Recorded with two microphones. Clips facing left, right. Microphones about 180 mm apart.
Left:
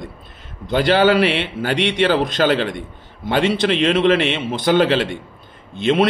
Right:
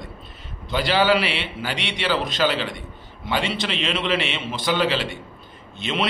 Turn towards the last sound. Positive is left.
turn(degrees=50)  # may be behind; listen again after turning